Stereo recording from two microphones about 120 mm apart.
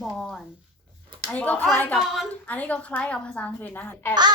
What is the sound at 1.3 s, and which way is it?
Clapping, 10° left (ahead or behind).